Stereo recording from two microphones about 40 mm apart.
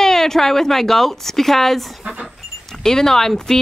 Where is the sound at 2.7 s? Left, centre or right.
Centre.